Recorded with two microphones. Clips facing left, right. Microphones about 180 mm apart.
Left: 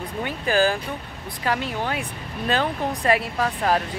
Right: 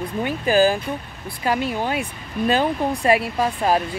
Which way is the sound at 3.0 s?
15° right (ahead or behind).